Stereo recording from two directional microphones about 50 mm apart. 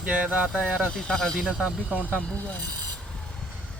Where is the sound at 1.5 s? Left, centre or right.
Centre.